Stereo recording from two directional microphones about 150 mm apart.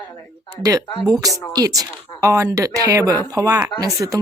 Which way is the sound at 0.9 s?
Centre (ahead or behind).